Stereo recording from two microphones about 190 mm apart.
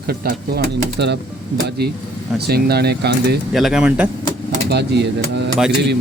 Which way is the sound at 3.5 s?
Centre (ahead or behind).